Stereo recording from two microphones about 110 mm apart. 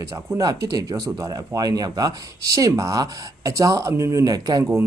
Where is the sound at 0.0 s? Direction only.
30° right (ahead or behind).